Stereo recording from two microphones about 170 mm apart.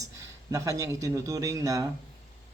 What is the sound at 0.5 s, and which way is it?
A man's voice, 20° right (ahead or behind).